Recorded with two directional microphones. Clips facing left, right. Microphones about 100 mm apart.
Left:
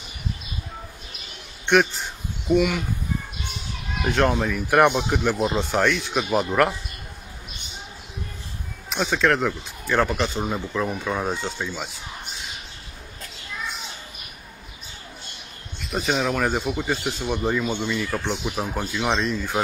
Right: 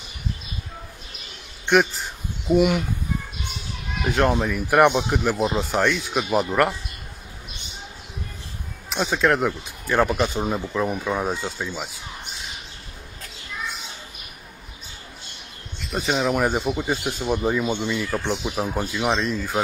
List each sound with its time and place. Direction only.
1.7 s a sound: centre (ahead or behind)
2.5 s speech: 20° right (ahead or behind)
4.0 s speech: centre (ahead or behind)
8.9 s speech: 5° right (ahead or behind)
15.9 s speech: centre (ahead or behind)